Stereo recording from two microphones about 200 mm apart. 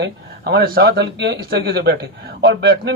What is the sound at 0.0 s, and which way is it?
A man's voice, 55° right (ahead or behind).